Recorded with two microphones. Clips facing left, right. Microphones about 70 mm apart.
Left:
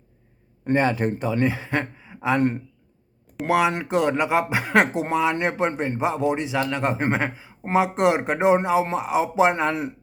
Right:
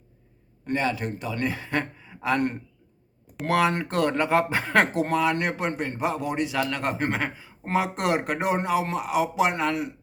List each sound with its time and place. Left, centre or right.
0.6 s speech: left